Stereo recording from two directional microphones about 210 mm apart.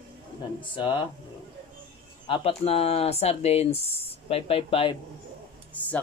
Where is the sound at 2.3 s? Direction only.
30° left (ahead or behind).